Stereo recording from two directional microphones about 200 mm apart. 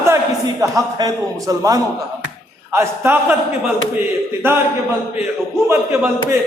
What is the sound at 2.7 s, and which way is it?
Speech, 10° right (ahead or behind).